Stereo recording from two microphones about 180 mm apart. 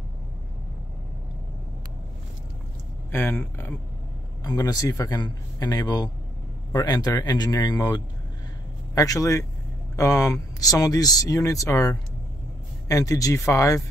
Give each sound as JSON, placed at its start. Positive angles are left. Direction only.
{"t": 3.1, "sound": "speech", "side_deg": 10}